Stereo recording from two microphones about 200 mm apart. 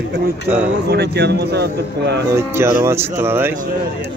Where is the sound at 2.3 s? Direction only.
15° right (ahead or behind).